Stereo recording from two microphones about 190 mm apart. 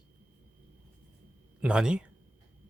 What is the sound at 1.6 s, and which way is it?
Speech, 5° right (ahead or behind).